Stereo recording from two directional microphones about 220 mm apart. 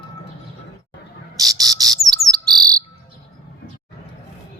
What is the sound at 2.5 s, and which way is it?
Insect, 20° right (ahead or behind).